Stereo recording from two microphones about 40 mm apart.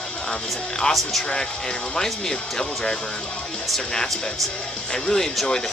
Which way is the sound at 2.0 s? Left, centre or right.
Centre.